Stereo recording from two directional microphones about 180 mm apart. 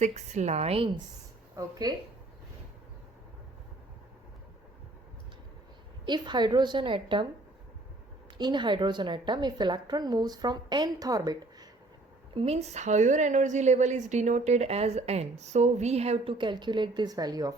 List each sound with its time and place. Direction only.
0.0 s a woman's voice: 40° right (ahead or behind)
1.5 s a woman's voice: 20° right (ahead or behind)
6.1 s a woman's voice: 25° right (ahead or behind)
8.4 s a woman's voice: 25° right (ahead or behind)
12.3 s a woman's voice: 35° right (ahead or behind)